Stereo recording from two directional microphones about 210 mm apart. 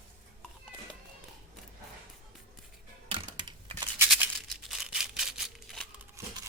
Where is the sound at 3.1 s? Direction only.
25° right (ahead or behind).